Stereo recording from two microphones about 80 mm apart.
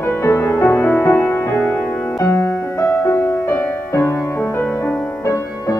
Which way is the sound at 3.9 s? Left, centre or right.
Left.